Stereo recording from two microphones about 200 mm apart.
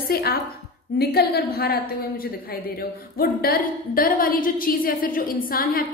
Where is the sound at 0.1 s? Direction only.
50° left (ahead or behind).